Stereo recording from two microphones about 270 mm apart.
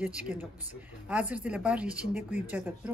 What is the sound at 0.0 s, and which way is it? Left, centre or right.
Speech, centre.